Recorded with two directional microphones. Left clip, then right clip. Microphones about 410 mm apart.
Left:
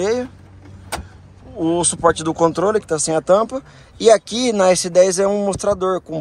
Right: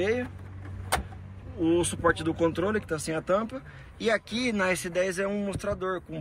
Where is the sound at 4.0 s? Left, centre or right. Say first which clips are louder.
Left 14 dB; centre.